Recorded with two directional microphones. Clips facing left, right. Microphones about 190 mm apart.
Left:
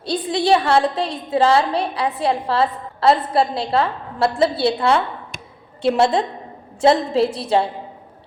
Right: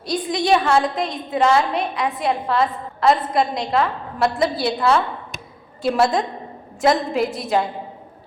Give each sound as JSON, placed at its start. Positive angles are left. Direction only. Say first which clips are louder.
{"t": 0.0, "sound": "a woman's voice", "louder": "left 2 dB", "side_deg": 30}